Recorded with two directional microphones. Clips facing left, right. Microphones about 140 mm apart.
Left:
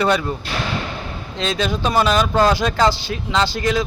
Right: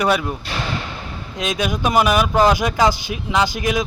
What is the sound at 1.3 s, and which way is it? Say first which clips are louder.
Speech: left 1 dB; 15° right (ahead or behind).